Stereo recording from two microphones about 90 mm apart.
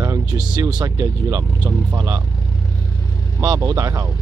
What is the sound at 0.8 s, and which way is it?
Speech, 40° right (ahead or behind).